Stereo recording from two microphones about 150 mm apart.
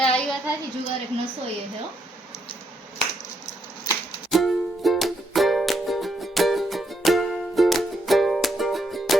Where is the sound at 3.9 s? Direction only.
25° left (ahead or behind).